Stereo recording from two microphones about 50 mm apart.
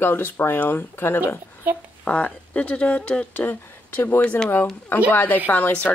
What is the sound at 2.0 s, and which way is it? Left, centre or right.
A woman's voice, left.